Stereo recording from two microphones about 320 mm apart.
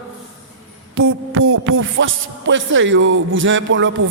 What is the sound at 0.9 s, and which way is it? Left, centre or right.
A man's voice, right.